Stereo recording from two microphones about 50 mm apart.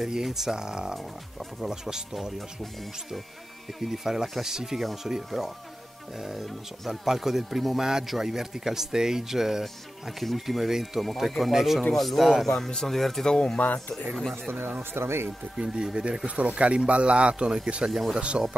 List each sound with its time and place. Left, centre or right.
0.0 s speech: centre
2.1 s speech: centre
13.3 s speech: centre
13.6 s speech: left
14.8 s speech: right
15.5 s speech: centre
17.8 s speech: centre